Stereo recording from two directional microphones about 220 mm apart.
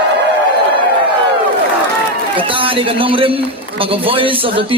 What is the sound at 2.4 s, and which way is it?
A man's voice, 25° right (ahead or behind).